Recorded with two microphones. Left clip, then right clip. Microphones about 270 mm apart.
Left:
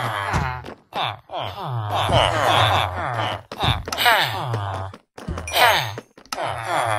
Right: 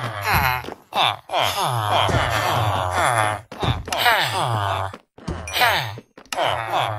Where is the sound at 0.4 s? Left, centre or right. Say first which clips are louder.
Right 7 dB; right.